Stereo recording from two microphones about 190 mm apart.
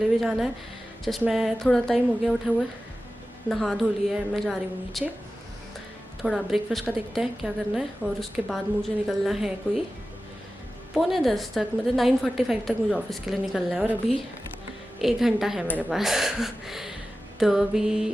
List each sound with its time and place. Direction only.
0.2 s a woman's voice: centre (ahead or behind)
6.2 s a woman's voice: centre (ahead or behind)
10.9 s a woman's voice: centre (ahead or behind)
15.0 s a woman's voice: centre (ahead or behind)
15.6 s a woman's voice: 10° left (ahead or behind)
16.0 s a woman's voice: centre (ahead or behind)